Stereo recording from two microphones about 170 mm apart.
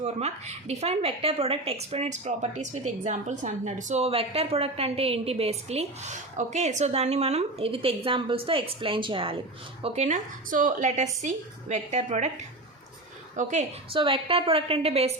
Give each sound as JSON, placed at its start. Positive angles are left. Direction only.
{"t": 0.0, "sound": "a woman's voice", "side_deg": -40}
{"t": 13.3, "sound": "speech", "side_deg": -45}
{"t": 13.9, "sound": "a woman's voice", "side_deg": -30}